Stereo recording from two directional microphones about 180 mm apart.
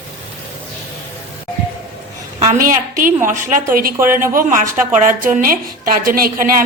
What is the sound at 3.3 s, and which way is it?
Speech, 45° right (ahead or behind).